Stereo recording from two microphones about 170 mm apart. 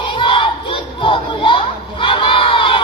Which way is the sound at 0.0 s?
30° left (ahead or behind).